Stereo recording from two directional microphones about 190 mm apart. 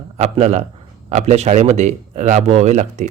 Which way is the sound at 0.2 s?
35° right (ahead or behind).